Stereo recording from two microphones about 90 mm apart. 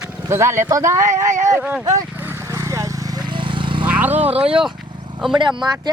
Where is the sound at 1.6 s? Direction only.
10° right (ahead or behind).